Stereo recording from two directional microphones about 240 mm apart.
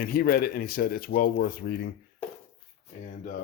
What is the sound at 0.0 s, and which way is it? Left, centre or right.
Speech, left.